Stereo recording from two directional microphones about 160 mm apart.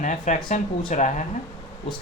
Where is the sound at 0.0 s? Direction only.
50° left (ahead or behind).